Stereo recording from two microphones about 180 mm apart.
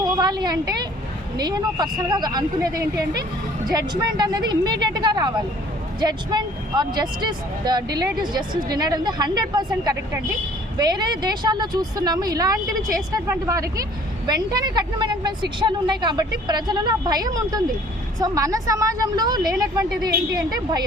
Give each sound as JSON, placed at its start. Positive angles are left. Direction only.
{"t": 0.0, "sound": "a woman's voice", "side_deg": -20}